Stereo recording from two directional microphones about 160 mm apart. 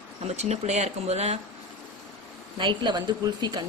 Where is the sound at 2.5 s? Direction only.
30° right (ahead or behind).